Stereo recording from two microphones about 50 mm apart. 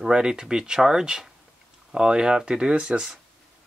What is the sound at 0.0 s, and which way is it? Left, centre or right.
Speech, centre.